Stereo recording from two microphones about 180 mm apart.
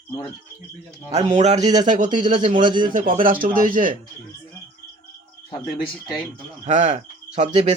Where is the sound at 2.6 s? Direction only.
25° right (ahead or behind).